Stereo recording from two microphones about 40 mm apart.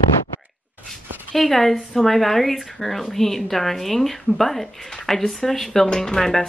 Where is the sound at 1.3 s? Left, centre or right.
Centre.